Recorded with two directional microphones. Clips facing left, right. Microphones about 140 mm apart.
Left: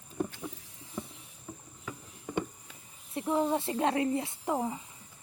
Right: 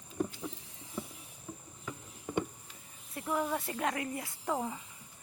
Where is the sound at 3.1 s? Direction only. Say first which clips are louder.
Left 5 dB; 25° left (ahead or behind).